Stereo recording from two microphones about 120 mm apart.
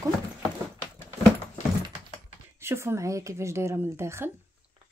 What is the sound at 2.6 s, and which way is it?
A woman's voice, 20° right (ahead or behind).